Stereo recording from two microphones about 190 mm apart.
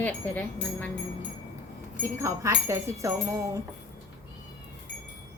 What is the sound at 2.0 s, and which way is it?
Speech, 15° right (ahead or behind).